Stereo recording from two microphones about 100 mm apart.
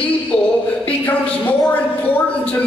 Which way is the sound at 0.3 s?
10° left (ahead or behind).